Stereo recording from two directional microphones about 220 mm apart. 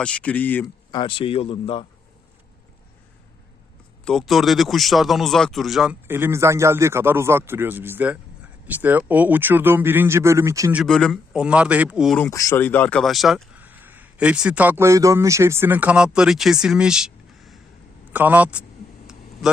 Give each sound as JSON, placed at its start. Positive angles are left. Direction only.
{"t": 0.0, "sound": "speech", "side_deg": 5}
{"t": 0.9, "sound": "a man's voice", "side_deg": 20}
{"t": 4.0, "sound": "speech", "side_deg": 0}
{"t": 12.3, "sound": "speech", "side_deg": 15}